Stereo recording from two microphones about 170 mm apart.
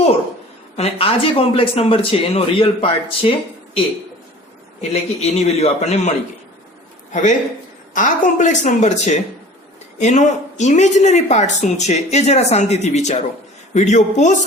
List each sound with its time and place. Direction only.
0.8 s speech: 35° left (ahead or behind)
4.8 s speech: 40° left (ahead or behind)